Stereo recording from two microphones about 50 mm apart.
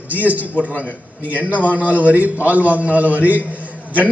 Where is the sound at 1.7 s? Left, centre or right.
Right.